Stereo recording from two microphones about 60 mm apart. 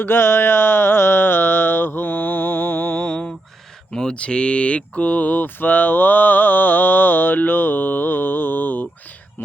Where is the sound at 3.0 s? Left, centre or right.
Centre.